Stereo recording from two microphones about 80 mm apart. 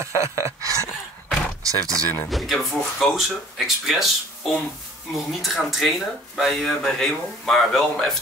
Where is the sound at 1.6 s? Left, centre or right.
Right.